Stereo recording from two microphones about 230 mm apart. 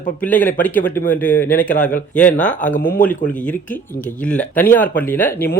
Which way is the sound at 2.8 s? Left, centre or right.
Left.